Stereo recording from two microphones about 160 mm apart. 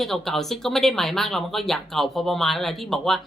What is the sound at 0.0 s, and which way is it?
Speech, centre (ahead or behind).